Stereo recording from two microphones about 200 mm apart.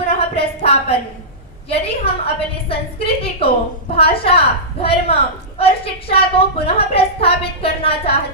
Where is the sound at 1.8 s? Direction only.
30° left (ahead or behind).